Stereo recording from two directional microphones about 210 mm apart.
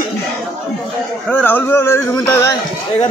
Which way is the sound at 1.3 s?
10° left (ahead or behind).